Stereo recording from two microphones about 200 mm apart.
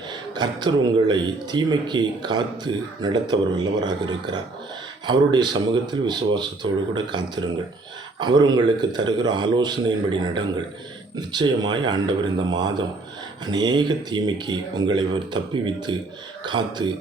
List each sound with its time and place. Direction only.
0.1 s speech: 20° right (ahead or behind)